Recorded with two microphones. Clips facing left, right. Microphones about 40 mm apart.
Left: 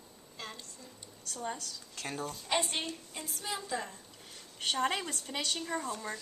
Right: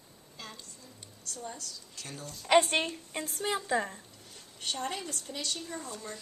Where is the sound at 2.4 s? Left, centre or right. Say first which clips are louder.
Right 10 dB; right.